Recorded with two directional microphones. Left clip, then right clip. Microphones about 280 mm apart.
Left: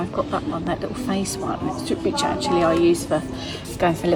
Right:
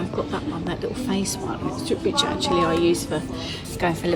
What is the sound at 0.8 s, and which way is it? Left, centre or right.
A woman's voice, centre.